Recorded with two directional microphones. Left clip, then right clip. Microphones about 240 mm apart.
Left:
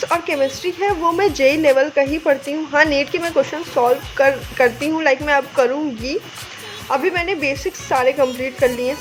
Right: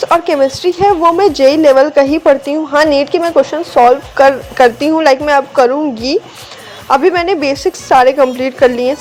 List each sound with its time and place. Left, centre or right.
0.0 s a woman's voice: centre